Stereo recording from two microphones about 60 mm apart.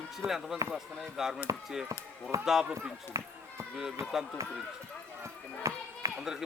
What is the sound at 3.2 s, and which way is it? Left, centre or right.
Speech, right.